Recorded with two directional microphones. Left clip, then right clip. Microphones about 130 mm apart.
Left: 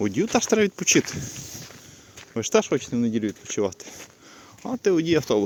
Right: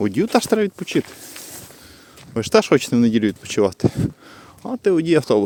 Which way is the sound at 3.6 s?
50° right (ahead or behind).